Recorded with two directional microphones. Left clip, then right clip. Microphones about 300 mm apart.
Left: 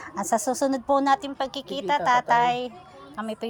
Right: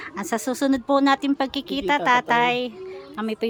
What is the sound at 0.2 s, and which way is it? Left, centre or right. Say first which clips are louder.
A man's voice: left 1 dB; centre.